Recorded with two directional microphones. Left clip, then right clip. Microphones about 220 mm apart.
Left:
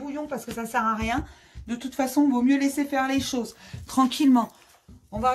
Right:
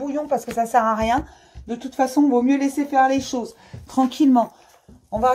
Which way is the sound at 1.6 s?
30° left (ahead or behind).